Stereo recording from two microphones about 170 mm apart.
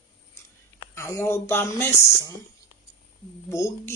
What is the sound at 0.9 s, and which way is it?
A woman's voice, 15° left (ahead or behind).